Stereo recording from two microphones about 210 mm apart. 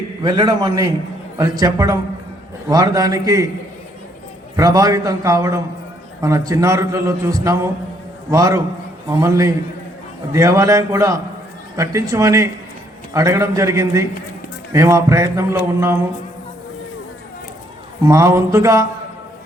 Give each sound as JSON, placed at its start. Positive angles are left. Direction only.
{"t": 0.2, "sound": "a man's voice", "side_deg": -20}
{"t": 4.5, "sound": "a man's voice", "side_deg": -15}
{"t": 18.0, "sound": "a man's voice", "side_deg": -15}